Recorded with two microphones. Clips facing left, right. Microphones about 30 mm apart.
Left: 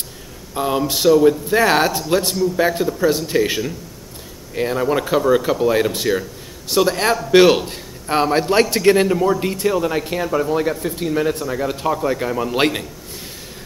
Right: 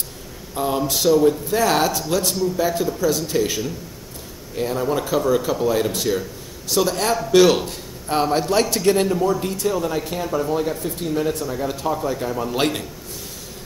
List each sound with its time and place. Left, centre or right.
0.6 s speech: centre
1.5 s a man's voice: left